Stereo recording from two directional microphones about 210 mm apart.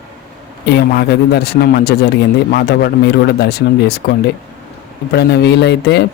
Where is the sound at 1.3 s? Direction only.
50° left (ahead or behind).